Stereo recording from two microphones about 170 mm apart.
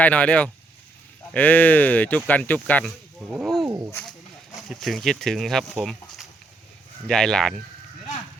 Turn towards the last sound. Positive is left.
turn(degrees=5)  # may be behind; listen again after turning